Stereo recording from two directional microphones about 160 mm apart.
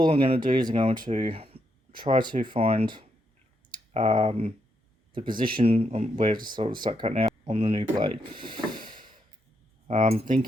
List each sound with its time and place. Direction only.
0.0 s speech: 30° right (ahead or behind)
3.9 s speech: 50° right (ahead or behind)
4.3 s speech: 35° right (ahead or behind)
5.2 s speech: 60° right (ahead or behind)
5.5 s speech: 40° right (ahead or behind)
8.7 s a sound: 60° right (ahead or behind)
9.8 s speech: 45° right (ahead or behind)